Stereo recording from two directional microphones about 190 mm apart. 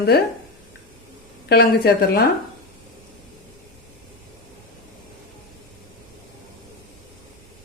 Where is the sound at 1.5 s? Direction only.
55° left (ahead or behind).